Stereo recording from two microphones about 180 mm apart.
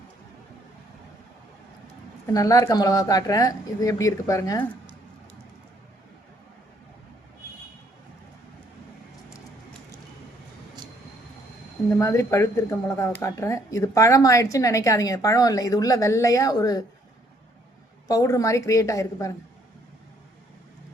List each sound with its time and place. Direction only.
2.2 s speech: 20° left (ahead or behind)
11.9 s speech: 15° left (ahead or behind)
18.1 s speech: 20° left (ahead or behind)